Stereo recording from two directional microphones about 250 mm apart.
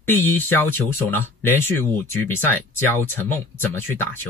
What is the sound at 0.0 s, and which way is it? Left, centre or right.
Speech, centre.